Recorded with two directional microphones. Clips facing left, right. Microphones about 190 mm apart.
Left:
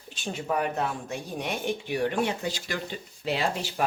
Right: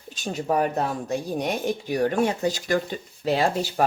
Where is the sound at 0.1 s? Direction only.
40° right (ahead or behind).